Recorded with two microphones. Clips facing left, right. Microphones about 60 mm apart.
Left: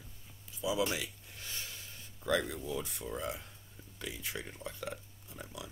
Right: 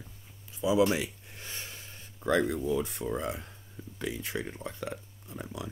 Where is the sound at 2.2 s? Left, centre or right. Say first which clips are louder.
Right 6 dB; right.